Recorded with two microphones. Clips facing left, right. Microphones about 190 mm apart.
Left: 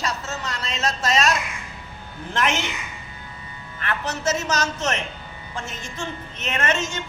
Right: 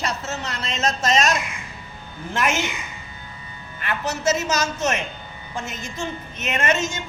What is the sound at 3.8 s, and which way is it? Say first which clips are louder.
A woman's voice: right 1 dB; 10° right (ahead or behind).